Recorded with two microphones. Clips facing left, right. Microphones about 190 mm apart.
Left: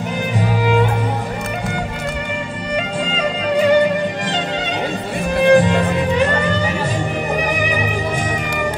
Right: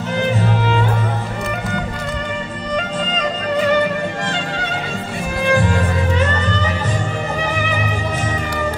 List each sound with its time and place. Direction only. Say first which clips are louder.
5.5 s music: left 4 dB; 20° left (ahead or behind)